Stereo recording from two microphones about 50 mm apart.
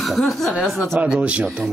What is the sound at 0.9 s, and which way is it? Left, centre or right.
Speech, right.